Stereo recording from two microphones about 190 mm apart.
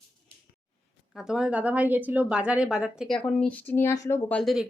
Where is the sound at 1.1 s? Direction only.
5° right (ahead or behind).